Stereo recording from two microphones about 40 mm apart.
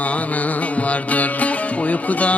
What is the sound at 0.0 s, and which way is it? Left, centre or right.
Music, left.